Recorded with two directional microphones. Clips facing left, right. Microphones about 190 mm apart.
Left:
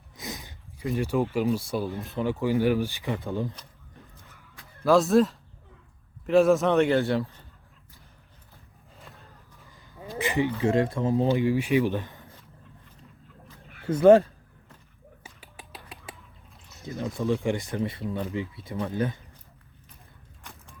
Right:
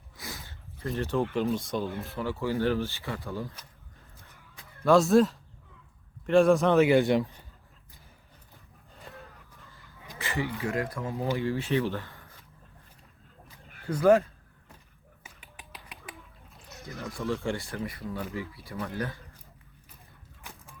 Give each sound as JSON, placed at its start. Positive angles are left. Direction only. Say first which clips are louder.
{"t": 0.2, "sound": "a sound", "louder": "left 4 dB", "side_deg": 20}
{"t": 0.9, "sound": "speech", "louder": "left 3 dB", "side_deg": 10}
{"t": 4.8, "sound": "speech", "louder": "left 1 dB", "side_deg": 0}
{"t": 6.9, "sound": "a man's voice", "louder": "right 2 dB", "side_deg": -15}
{"t": 9.0, "sound": "a sound", "louder": "right 4 dB", "side_deg": 0}
{"t": 10.2, "sound": "speech", "louder": "left 7 dB", "side_deg": 15}
{"t": 11.3, "sound": "speech", "louder": "left 5 dB", "side_deg": 15}
{"t": 13.8, "sound": "speech", "louder": "left 5 dB", "side_deg": 30}
{"t": 15.2, "sound": "finger snapping", "louder": "left 2 dB", "side_deg": 30}
{"t": 16.8, "sound": "speech", "louder": "left 5 dB", "side_deg": 15}